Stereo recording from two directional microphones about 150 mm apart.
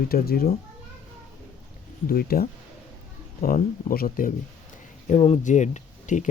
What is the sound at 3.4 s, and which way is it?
Speech, 75° left (ahead or behind).